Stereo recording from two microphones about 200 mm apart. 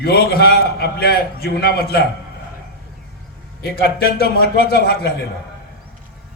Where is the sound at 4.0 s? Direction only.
50° left (ahead or behind).